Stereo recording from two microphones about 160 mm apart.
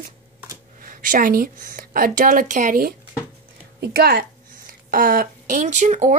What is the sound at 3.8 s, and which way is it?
A woman's voice, 85° right.